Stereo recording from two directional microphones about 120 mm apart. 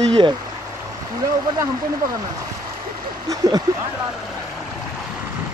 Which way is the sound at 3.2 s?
30° right (ahead or behind).